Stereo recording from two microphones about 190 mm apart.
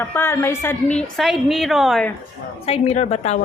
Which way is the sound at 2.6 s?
35° left (ahead or behind).